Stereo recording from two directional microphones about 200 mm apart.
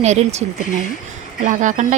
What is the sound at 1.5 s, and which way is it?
Speech, 40° right (ahead or behind).